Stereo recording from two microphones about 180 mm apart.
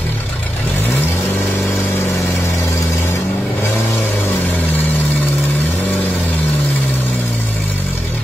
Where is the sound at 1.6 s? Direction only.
Centre (ahead or behind).